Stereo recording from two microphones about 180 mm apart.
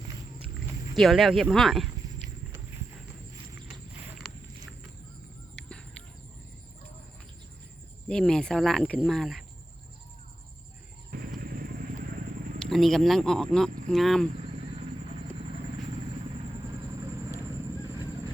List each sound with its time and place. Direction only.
0.9 s speech: centre (ahead or behind)
5.5 s fowl: 5° left (ahead or behind)
8.0 s speech: 5° left (ahead or behind)
11.1 s vehicle: 55° right (ahead or behind)
12.6 s speech: centre (ahead or behind)